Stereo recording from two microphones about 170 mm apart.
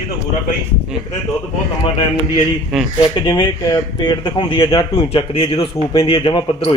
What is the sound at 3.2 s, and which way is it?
Speech, 25° left (ahead or behind).